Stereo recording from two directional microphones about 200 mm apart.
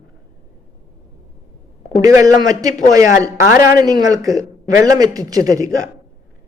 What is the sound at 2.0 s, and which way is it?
Speech, 15° right (ahead or behind).